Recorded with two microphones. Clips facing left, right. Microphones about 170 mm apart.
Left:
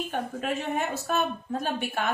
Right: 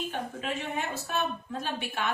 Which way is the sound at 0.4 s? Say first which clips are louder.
Left 5 dB; 45° left (ahead or behind).